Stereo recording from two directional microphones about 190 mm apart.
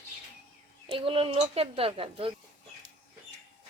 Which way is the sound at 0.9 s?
30° right (ahead or behind).